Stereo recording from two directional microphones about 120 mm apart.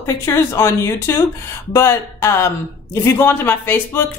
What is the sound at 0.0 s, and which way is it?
Speech, 25° left (ahead or behind).